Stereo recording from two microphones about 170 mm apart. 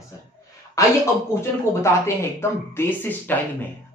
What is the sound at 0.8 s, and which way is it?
Speech, 20° left (ahead or behind).